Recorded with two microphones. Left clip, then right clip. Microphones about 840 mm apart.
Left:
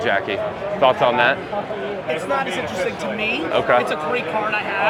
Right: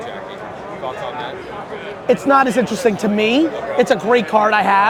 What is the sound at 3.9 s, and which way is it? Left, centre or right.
Speech, right.